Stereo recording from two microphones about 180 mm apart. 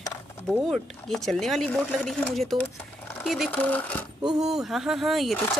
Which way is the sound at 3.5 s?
10° left (ahead or behind).